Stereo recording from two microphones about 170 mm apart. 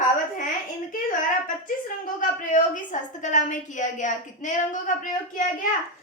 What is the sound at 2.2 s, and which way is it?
A woman's voice, 50° left (ahead or behind).